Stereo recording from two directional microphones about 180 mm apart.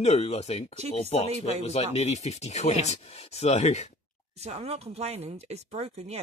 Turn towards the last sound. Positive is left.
turn(degrees=-35)  # may be behind; listen again after turning